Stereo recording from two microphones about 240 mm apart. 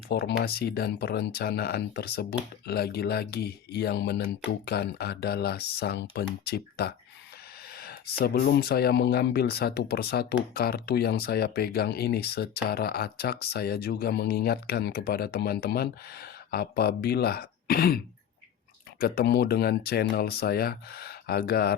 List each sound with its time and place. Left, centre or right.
0.1 s speech: left
7.8 s a sound: left
8.2 s speech: left